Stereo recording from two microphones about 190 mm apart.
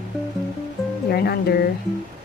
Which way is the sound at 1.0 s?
55° left (ahead or behind).